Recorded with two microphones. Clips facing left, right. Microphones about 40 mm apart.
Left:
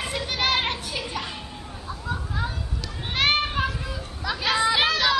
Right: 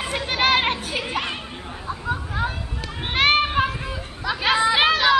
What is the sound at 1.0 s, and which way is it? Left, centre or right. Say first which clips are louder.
Children playing: right 5 dB; right.